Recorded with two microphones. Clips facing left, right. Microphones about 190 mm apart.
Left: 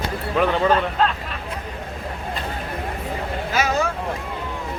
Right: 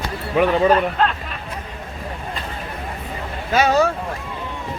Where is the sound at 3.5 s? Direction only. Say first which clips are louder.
Right 6 dB; 30° right (ahead or behind).